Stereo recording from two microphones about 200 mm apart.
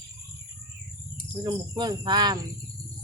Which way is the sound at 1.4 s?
20° right (ahead or behind).